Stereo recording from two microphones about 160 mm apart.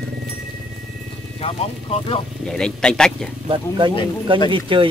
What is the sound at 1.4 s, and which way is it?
Speech, 35° left (ahead or behind).